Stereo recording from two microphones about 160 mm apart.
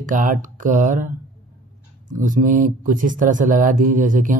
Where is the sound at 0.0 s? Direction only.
55° right (ahead or behind).